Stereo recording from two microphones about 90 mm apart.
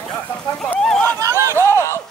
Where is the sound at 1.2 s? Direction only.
30° right (ahead or behind).